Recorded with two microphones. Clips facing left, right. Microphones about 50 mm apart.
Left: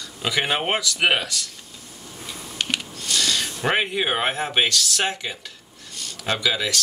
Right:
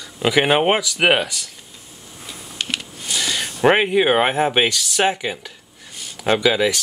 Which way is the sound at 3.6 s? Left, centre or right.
Right.